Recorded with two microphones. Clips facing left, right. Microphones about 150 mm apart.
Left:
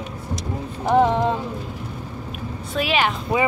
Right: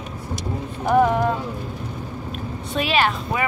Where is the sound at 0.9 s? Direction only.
25° left (ahead or behind).